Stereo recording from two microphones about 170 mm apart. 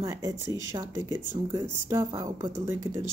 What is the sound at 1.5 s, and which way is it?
Speech, 15° right (ahead or behind).